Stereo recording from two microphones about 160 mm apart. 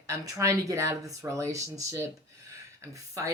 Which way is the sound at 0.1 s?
20° right (ahead or behind).